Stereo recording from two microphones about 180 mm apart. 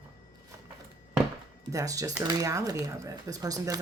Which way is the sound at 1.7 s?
20° right (ahead or behind).